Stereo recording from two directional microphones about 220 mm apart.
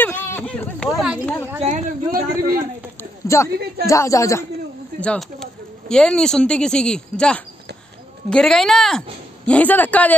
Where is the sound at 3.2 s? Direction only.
15° left (ahead or behind).